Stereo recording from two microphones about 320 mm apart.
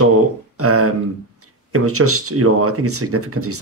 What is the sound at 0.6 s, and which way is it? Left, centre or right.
Speech, right.